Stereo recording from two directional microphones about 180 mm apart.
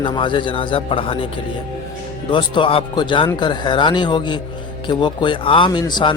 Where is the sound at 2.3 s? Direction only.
30° left (ahead or behind).